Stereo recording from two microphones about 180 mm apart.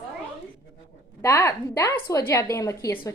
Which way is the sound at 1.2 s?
15° left (ahead or behind).